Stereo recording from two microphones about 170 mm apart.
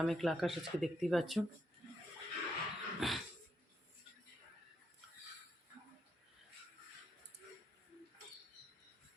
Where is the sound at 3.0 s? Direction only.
Centre (ahead or behind).